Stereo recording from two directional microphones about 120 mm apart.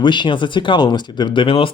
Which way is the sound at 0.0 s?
40° left (ahead or behind).